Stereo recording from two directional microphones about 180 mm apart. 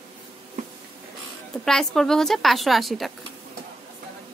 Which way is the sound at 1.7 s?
Centre (ahead or behind).